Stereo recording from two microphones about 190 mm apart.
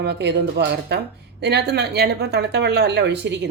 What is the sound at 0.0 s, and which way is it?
Speech, 65° right (ahead or behind).